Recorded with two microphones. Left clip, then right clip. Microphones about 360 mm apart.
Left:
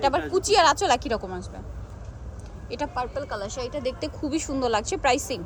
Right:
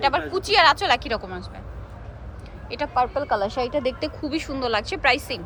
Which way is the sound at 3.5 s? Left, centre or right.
Centre.